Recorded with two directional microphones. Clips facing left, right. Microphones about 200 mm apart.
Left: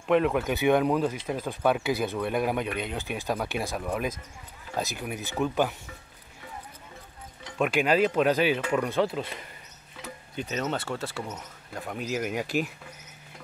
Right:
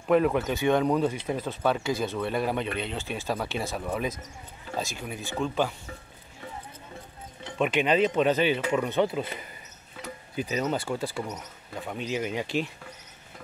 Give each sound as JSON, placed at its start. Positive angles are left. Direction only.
{"t": 0.1, "sound": "speech", "side_deg": 0}
{"t": 3.7, "sound": "speech", "side_deg": 0}
{"t": 5.0, "sound": "speech", "side_deg": 15}
{"t": 7.5, "sound": "speech", "side_deg": 5}